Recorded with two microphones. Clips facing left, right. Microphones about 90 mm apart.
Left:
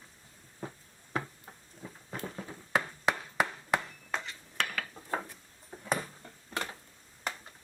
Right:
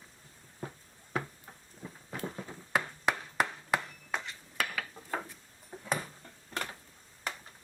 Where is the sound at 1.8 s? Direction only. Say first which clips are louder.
Even; 5° left (ahead or behind).